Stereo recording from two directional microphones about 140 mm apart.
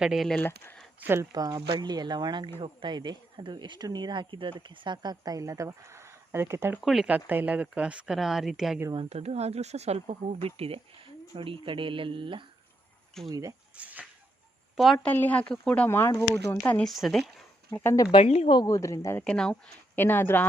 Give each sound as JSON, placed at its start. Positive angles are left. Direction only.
{"t": 0.0, "sound": "speech", "side_deg": 0}
{"t": 0.3, "sound": "speech", "side_deg": 15}
{"t": 0.9, "sound": "speech", "side_deg": -15}
{"t": 1.3, "sound": "speech", "side_deg": -25}
{"t": 6.8, "sound": "speech", "side_deg": -5}
{"t": 9.0, "sound": "speech", "side_deg": -50}
{"t": 13.1, "sound": "speech", "side_deg": 5}
{"t": 13.7, "sound": "speech", "side_deg": -10}
{"t": 15.0, "sound": "speech", "side_deg": 10}
{"t": 16.9, "sound": "speech", "side_deg": 0}
{"t": 17.7, "sound": "speech", "side_deg": 25}
{"t": 18.1, "sound": "a woman's voice", "side_deg": 45}
{"t": 18.5, "sound": "speech", "side_deg": 25}
{"t": 19.2, "sound": "speech", "side_deg": 5}